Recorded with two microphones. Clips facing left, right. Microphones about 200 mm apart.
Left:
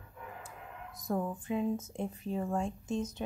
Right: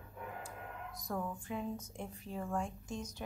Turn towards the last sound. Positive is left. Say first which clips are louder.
# left 8 dB
turn(degrees=25)  # may be behind; listen again after turning